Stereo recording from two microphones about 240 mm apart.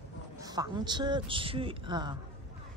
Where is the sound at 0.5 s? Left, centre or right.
Centre.